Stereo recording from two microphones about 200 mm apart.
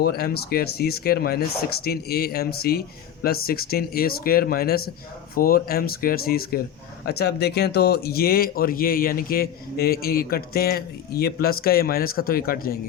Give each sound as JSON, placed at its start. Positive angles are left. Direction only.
{"t": 0.0, "sound": "speech", "side_deg": 50}